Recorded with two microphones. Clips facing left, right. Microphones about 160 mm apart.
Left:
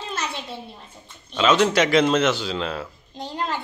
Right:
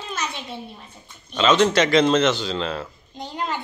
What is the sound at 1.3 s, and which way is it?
A child's voice, 5° left (ahead or behind).